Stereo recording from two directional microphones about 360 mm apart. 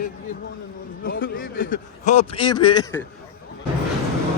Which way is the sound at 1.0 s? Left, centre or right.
Left.